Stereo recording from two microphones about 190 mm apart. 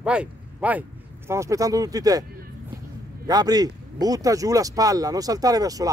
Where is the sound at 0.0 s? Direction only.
5° right (ahead or behind).